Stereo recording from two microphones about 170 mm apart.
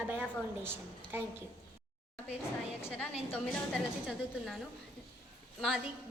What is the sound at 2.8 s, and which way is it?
Speech, 10° left (ahead or behind).